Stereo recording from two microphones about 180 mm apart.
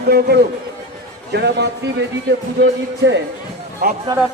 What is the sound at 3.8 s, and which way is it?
Speech, 55° right (ahead or behind).